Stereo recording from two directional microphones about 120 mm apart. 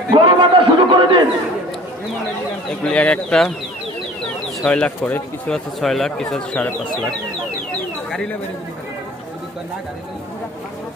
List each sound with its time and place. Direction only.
0.1 s a sound: 45° right (ahead or behind)
2.8 s speech: 10° left (ahead or behind)
4.6 s speech: 10° left (ahead or behind)
5.8 s speech: centre (ahead or behind)